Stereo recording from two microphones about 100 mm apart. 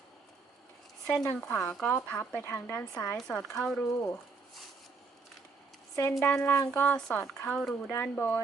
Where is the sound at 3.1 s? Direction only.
5° left (ahead or behind).